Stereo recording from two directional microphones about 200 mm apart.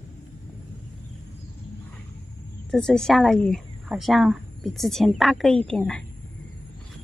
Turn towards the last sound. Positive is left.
turn(degrees=5)  # may be behind; listen again after turning